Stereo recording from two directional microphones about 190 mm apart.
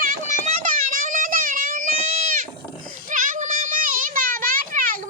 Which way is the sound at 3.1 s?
45° right (ahead or behind).